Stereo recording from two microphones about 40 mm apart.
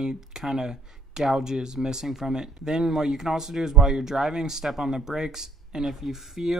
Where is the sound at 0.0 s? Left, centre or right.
Centre.